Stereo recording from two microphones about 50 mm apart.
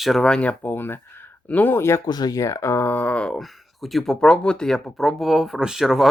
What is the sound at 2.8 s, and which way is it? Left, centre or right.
Speech, left.